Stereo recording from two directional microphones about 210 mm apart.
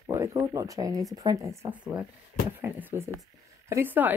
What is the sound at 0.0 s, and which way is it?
A woman's voice, 15° right (ahead or behind).